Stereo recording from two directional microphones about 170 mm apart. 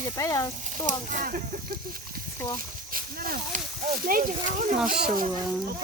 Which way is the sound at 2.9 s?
55° right (ahead or behind).